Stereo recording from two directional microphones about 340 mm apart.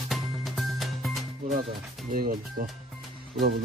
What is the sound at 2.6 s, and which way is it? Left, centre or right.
Speech, right.